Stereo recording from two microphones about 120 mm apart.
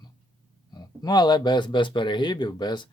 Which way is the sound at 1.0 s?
35° left (ahead or behind).